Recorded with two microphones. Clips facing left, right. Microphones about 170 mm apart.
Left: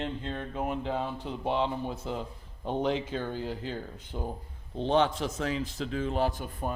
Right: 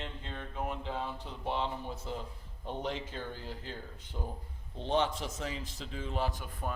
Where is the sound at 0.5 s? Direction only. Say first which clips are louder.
Left 5 dB; 75° left (ahead or behind).